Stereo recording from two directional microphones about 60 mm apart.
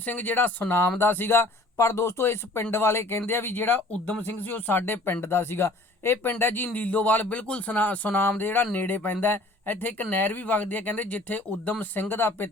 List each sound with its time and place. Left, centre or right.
0.0 s speech: left
0.7 s speech: left
1.8 s speech: left